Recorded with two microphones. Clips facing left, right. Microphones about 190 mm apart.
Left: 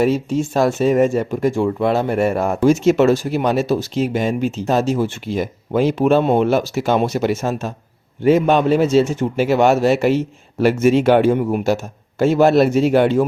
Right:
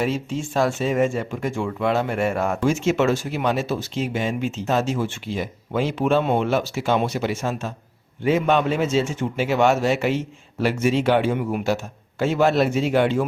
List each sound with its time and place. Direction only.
0.0 s speech: 40° left (ahead or behind)